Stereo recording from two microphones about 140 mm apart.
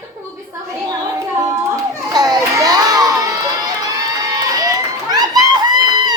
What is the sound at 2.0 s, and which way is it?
Crowd, 30° right (ahead or behind).